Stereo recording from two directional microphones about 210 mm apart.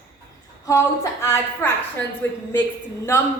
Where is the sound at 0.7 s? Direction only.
15° left (ahead or behind).